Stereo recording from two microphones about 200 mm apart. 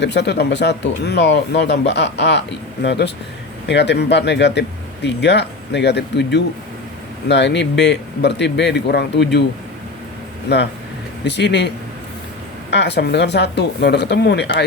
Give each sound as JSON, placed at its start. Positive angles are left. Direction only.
{"t": 0.0, "sound": "speech", "side_deg": 60}
{"t": 10.5, "sound": "speech", "side_deg": 55}
{"t": 12.7, "sound": "speech", "side_deg": 60}